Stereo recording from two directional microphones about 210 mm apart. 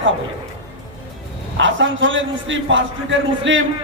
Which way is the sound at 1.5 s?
65° right (ahead or behind).